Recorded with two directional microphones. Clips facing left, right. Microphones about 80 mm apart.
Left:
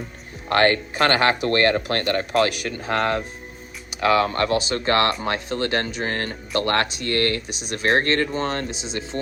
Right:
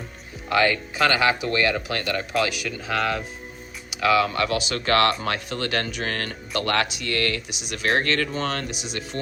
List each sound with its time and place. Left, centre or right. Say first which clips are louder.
0.4 s speech: left 3 dB; left